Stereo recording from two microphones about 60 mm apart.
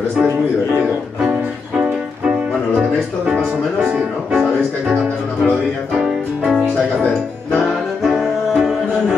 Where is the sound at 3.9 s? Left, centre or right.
Centre.